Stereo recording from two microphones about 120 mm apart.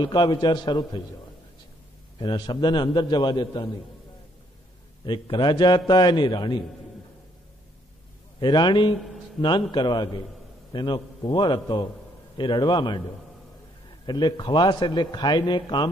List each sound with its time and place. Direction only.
0.0 s a man's voice: 35° left (ahead or behind)
2.1 s a man's voice: 35° left (ahead or behind)
5.0 s a man's voice: 40° left (ahead or behind)
8.4 s a man's voice: 35° left (ahead or behind)
14.0 s a man's voice: 35° left (ahead or behind)